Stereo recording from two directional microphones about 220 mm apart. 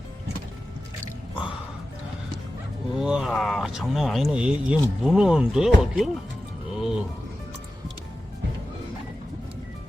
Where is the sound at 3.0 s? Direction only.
5° right (ahead or behind).